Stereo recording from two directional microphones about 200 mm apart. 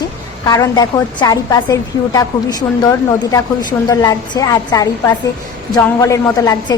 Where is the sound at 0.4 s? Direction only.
20° left (ahead or behind).